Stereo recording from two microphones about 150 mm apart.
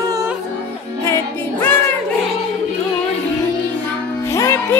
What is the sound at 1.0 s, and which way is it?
Music, 15° left (ahead or behind).